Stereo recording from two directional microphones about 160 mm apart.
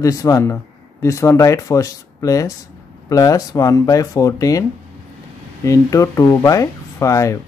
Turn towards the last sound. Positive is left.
turn(degrees=20)  # may be behind; listen again after turning